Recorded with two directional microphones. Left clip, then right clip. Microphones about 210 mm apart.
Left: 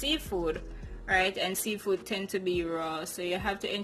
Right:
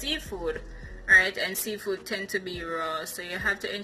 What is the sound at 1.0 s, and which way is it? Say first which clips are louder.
Speech: right 7 dB; 45° left (ahead or behind).